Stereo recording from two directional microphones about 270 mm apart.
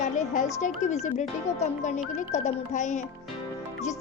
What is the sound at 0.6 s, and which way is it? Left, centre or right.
Speech, left.